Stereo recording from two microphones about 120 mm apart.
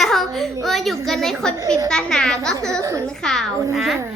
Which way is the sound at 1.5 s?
25° right (ahead or behind).